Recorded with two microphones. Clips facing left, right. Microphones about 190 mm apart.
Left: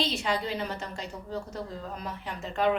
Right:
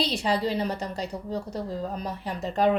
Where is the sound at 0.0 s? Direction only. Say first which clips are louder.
Right 4 dB; 35° right (ahead or behind).